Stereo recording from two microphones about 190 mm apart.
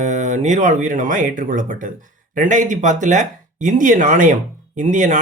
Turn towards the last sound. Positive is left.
turn(degrees=-40)  # may be behind; listen again after turning